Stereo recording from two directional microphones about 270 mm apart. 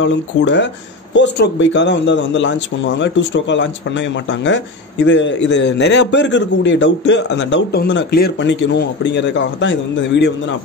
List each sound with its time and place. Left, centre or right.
0.0 s speech: left